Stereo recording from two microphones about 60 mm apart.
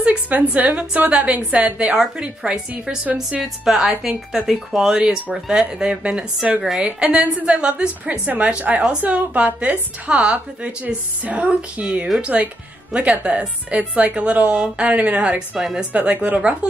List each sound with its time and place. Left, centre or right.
0.0 s a woman's voice: right